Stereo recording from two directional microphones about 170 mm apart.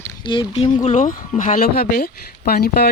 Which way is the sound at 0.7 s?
45° left (ahead or behind).